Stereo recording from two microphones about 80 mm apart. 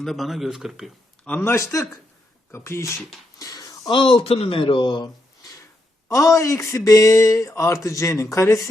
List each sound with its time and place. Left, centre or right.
0.0 s speech: centre
1.2 s a man's voice: centre
1.5 s speech: left
3.3 s a sound: left
3.8 s speech: left
6.1 s speech: left